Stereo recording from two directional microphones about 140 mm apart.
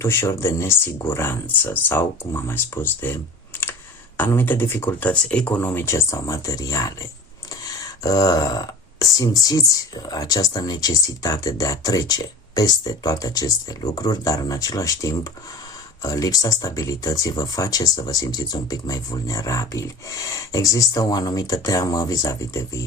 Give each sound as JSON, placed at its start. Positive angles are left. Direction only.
{"t": 0.0, "sound": "speech", "side_deg": 20}
{"t": 4.2, "sound": "speech", "side_deg": 15}